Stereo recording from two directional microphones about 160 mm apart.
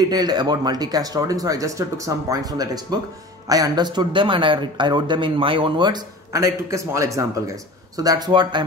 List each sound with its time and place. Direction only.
0.1 s speech: 25° right (ahead or behind)